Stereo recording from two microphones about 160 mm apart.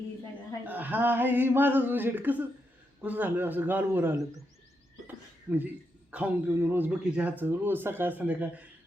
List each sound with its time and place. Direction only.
0.6 s speech: 10° right (ahead or behind)
5.0 s a sound: 10° right (ahead or behind)
6.1 s speech: 10° right (ahead or behind)